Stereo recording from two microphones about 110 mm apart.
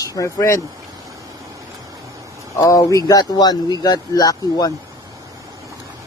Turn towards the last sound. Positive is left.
turn(degrees=35)  # may be behind; listen again after turning